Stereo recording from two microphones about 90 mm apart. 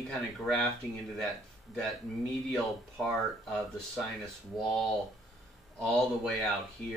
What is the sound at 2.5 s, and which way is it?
Speech, 5° left (ahead or behind).